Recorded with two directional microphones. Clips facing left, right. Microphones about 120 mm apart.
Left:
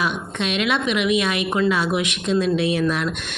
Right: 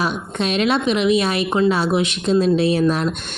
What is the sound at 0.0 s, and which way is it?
Speech, 35° right (ahead or behind).